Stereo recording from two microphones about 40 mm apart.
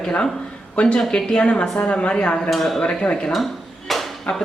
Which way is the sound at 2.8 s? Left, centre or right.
Left.